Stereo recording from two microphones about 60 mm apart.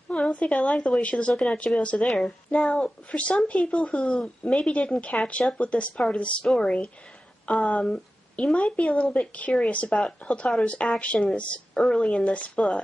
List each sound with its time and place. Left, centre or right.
0.1 s a woman's voice: left
2.0 s a woman's voice: centre
2.7 s a woman's voice: left
7.8 s a woman's voice: centre